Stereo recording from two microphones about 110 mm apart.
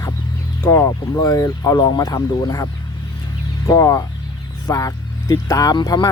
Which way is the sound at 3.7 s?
30° left (ahead or behind).